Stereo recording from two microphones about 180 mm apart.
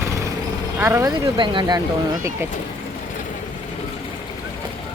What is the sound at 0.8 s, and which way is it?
Speech, 15° right (ahead or behind).